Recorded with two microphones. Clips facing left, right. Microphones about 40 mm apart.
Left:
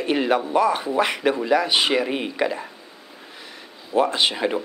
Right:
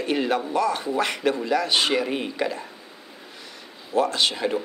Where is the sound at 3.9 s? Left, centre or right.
Centre.